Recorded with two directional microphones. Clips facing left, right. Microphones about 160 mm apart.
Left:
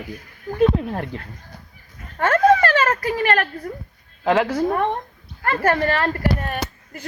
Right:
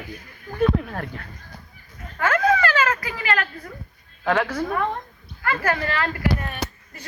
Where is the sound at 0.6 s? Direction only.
25° left (ahead or behind).